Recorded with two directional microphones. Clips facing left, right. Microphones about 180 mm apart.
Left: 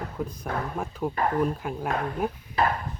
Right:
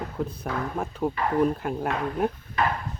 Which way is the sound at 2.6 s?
35° left (ahead or behind).